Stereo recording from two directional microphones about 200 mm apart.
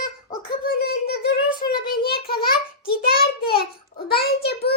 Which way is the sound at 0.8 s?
50° left (ahead or behind).